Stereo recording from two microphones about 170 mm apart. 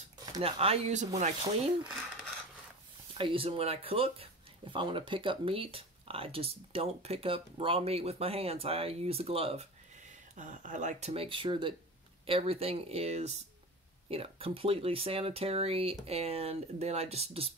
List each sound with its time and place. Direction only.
0.4 s speech: 35° right (ahead or behind)
3.2 s speech: 30° right (ahead or behind)
10.3 s speech: 50° right (ahead or behind)